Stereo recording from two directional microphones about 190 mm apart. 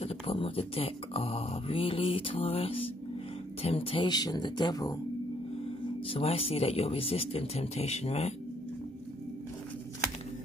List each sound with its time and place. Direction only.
0.0 s speech: 30° left (ahead or behind)
6.0 s speech: 30° left (ahead or behind)